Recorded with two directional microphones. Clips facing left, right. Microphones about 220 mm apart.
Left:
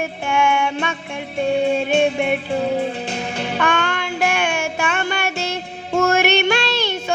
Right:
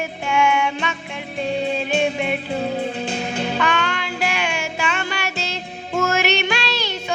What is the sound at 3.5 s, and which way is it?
Music, 50° left (ahead or behind).